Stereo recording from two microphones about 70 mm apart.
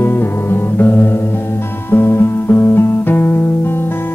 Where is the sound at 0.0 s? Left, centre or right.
Left.